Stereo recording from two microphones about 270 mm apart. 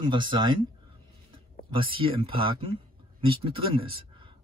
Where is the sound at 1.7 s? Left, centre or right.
Centre.